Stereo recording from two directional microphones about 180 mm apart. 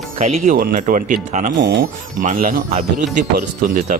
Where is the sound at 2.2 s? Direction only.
50° right (ahead or behind).